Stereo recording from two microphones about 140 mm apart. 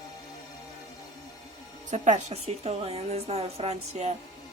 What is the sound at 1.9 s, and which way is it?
A woman's voice, 55° right (ahead or behind).